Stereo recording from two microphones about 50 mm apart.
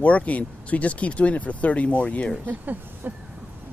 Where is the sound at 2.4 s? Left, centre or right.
Right.